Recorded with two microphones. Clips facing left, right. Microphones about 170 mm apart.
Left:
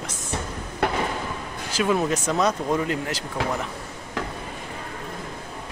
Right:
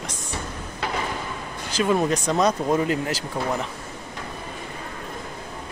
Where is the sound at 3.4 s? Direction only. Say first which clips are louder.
Even; 90° left.